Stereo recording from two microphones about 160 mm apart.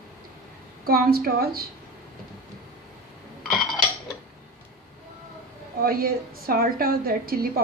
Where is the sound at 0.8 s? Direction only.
70° right (ahead or behind).